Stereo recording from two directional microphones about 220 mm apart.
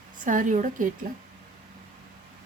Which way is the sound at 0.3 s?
35° right (ahead or behind).